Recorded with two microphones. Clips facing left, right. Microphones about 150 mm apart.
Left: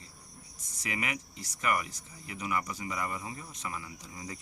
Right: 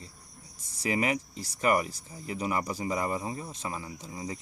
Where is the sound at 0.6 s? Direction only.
30° right (ahead or behind).